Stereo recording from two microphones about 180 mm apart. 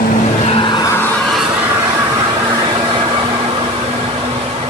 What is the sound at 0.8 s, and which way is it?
Music, 10° left (ahead or behind).